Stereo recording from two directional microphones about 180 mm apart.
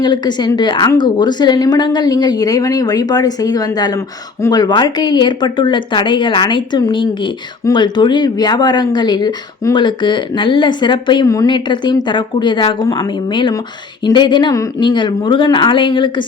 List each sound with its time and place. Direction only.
0.0 s speech: 25° left (ahead or behind)